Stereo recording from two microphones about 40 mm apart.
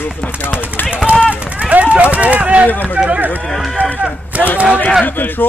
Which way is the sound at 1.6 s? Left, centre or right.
Right.